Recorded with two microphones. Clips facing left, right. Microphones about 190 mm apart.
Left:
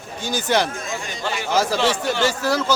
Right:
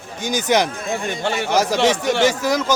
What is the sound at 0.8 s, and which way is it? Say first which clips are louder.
Speech: right 5 dB; 60° right (ahead or behind).